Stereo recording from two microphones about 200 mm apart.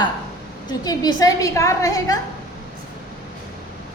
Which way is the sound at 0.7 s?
20° left (ahead or behind).